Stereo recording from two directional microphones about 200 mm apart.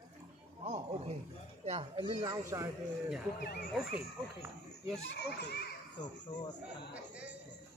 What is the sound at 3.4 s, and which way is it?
Speech, 50° left (ahead or behind).